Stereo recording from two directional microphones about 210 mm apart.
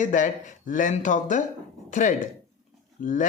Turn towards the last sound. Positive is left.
turn(degrees=40)  # may be behind; listen again after turning